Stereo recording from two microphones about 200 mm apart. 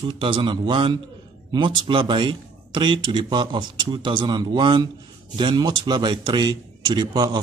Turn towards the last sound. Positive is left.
turn(degrees=-20)  # may be behind; listen again after turning